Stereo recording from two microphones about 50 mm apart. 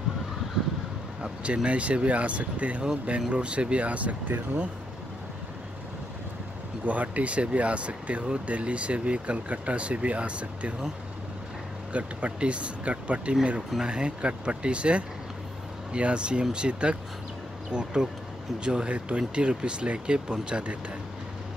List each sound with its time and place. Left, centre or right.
1.2 s speech: right
6.9 s speech: right
11.9 s speech: right